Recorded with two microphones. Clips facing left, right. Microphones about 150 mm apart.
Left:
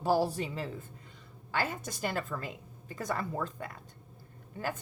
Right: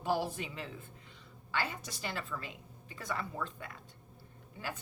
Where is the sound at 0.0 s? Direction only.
35° left (ahead or behind).